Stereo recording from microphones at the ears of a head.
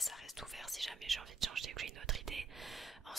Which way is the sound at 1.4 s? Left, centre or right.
Right.